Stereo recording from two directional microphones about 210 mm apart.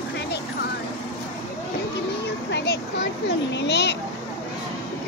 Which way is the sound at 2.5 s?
55° left (ahead or behind).